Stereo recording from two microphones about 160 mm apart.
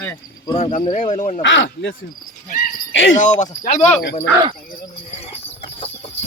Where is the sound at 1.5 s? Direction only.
90° left.